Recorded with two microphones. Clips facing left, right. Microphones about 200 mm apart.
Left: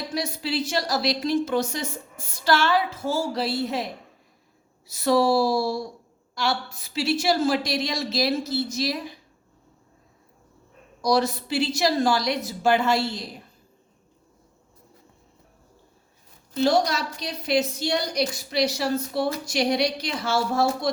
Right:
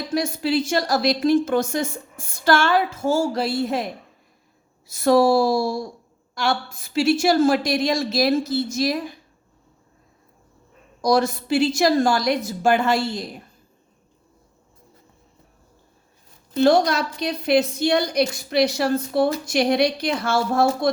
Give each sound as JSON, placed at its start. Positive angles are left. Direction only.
{"t": 0.1, "sound": "a woman's voice", "side_deg": -50}
{"t": 4.9, "sound": "a woman's voice", "side_deg": -50}
{"t": 11.0, "sound": "a woman's voice", "side_deg": -50}
{"t": 16.6, "sound": "a woman's voice", "side_deg": -55}